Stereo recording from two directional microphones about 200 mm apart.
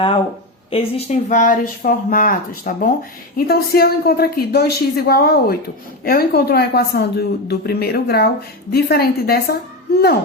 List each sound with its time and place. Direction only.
0.7 s speech: 30° left (ahead or behind); by 9.6 s 50° left (ahead or behind)